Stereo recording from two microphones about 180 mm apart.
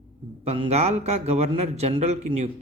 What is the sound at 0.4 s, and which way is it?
A man's voice, 35° right (ahead or behind).